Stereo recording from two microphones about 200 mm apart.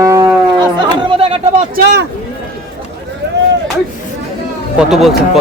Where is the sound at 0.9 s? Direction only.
25° right (ahead or behind).